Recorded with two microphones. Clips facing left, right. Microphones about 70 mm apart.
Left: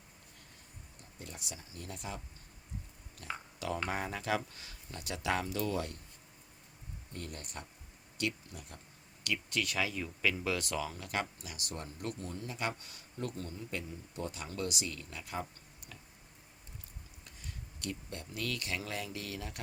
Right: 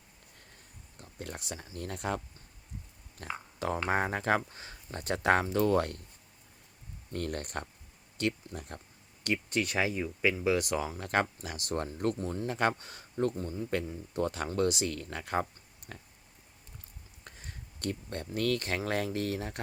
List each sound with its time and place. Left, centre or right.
1.2 s speech: right
7.1 s speech: right
9.2 s speech: right
13.3 s speech: right
13.6 s speech: right
17.2 s a sound: right
18.9 s speech: right